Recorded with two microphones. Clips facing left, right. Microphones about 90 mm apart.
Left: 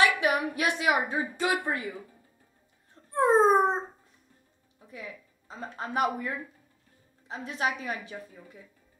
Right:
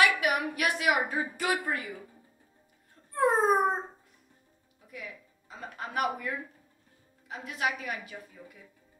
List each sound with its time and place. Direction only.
0.0 s a woman's voice: 25° left (ahead or behind)
3.2 s speech: 25° left (ahead or behind)
5.5 s a woman's voice: 30° left (ahead or behind)